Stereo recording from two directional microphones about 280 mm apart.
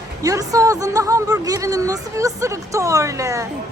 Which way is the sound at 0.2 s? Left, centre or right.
Centre.